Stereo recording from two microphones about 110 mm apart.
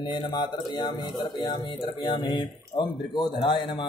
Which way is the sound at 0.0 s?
45° left (ahead or behind).